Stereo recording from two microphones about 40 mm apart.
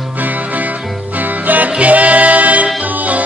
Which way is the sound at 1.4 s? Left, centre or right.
Right.